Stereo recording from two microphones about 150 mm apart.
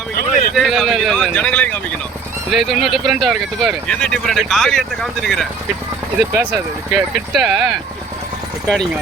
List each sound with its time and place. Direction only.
0.2 s vehicle: 70° left (ahead or behind)
0.5 s speech: centre (ahead or behind)
6.3 s speech: 10° right (ahead or behind); by 8.9 s 5° left (ahead or behind)